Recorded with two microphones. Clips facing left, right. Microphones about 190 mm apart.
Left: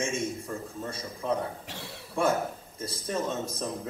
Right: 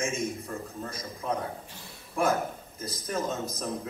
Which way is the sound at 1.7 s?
75° left (ahead or behind).